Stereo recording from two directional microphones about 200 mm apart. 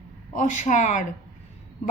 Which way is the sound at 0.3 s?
40° left (ahead or behind).